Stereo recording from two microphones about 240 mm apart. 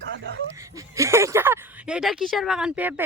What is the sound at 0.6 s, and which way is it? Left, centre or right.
Speech, centre.